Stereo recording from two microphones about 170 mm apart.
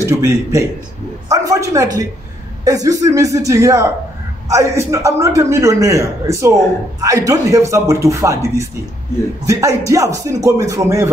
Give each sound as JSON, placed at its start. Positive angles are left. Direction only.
{"t": 0.0, "sound": "a man's voice", "side_deg": -15}